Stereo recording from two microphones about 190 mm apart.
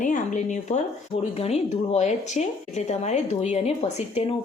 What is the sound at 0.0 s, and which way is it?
Speech, 40° left (ahead or behind).